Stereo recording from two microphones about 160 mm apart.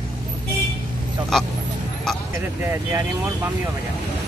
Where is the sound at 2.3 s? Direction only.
15° right (ahead or behind).